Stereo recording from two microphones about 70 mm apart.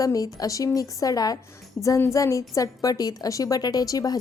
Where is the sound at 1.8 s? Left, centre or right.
Left.